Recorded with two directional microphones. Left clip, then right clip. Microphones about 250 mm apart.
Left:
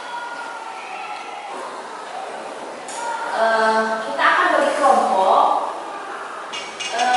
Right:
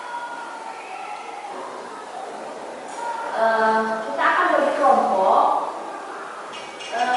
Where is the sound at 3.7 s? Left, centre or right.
Centre.